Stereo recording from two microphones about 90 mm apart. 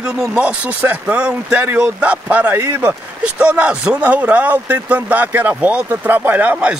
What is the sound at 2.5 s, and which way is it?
Speech, 25° right (ahead or behind).